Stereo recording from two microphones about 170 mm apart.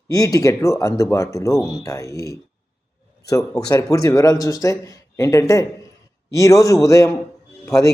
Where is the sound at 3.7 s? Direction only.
20° left (ahead or behind).